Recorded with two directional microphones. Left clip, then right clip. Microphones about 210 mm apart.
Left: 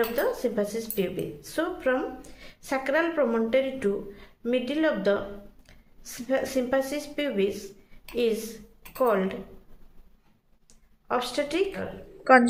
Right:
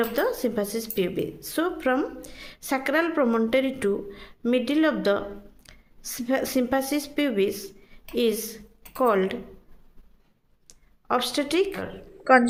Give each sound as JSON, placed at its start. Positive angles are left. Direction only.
{"t": 0.1, "sound": "speech", "side_deg": -55}
{"t": 10.7, "sound": "speech", "side_deg": -55}
{"t": 12.2, "sound": "a woman's voice", "side_deg": 0}